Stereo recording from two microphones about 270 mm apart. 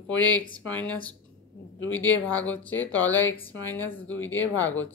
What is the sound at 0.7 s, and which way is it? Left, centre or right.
Speech, centre.